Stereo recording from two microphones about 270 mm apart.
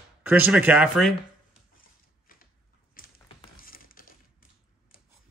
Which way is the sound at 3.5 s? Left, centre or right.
Left.